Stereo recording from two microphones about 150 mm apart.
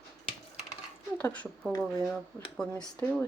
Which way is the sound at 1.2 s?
10° left (ahead or behind).